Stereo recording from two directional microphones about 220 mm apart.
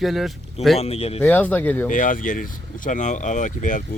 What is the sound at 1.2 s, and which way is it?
Speech, 5° left (ahead or behind).